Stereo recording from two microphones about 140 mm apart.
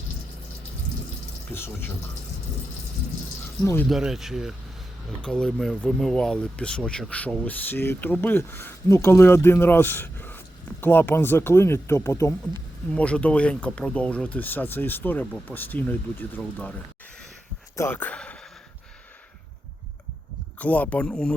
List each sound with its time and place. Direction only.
1.5 s speech: 15° left (ahead or behind)
3.6 s speech: 20° left (ahead or behind)
3.8 s speech: centre (ahead or behind); by 12.3 s 20° left (ahead or behind)
12.9 s speech: 10° left (ahead or behind)
20.6 s speech: 10° left (ahead or behind)